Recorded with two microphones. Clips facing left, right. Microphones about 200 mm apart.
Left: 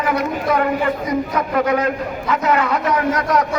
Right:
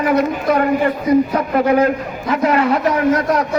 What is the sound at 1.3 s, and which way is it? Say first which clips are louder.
A man's voice: right 3 dB; 30° right (ahead or behind).